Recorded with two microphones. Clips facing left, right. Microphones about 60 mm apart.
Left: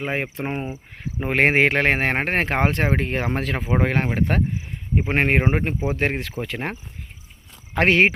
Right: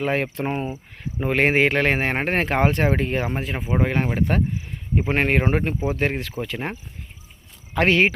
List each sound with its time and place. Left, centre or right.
0.0 s speech: centre
1.3 s speech: left
3.3 s speech: left
3.6 s speech: left
6.0 s speech: left